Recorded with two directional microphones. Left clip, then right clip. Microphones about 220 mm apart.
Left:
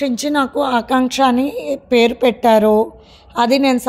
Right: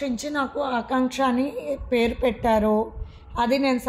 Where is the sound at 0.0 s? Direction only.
45° left (ahead or behind).